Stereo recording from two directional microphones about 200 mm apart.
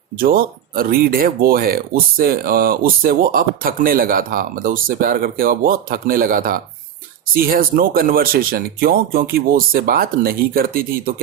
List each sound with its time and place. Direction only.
0.2 s speech: 45° right (ahead or behind)